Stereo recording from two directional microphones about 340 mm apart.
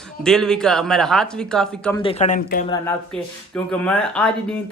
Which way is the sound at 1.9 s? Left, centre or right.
Centre.